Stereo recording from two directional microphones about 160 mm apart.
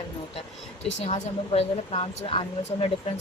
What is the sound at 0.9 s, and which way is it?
Speech, 40° left (ahead or behind).